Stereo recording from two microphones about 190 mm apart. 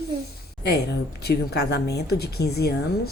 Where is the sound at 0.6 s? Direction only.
60° left (ahead or behind).